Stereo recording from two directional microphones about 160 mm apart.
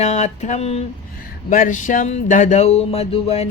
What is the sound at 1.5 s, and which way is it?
Speech, 55° left (ahead or behind).